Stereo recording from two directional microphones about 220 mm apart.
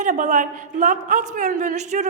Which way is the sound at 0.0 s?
35° right (ahead or behind).